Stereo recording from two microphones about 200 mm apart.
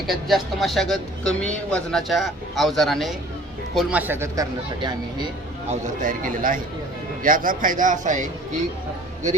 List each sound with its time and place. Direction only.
0.1 s a man's voice: centre (ahead or behind); by 4.9 s 20° right (ahead or behind)
5.8 s a man's voice: 40° right (ahead or behind)